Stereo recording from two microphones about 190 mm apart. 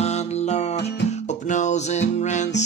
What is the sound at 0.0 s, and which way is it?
Music, 35° left (ahead or behind).